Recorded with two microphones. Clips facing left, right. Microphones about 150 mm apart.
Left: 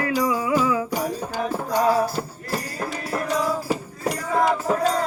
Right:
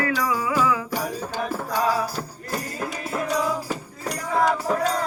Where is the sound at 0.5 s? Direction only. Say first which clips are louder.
Left 1 dB; 30° left (ahead or behind).